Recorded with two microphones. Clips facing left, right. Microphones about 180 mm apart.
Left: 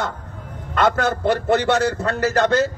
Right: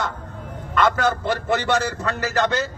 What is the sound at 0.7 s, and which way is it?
A man's voice, 55° left (ahead or behind).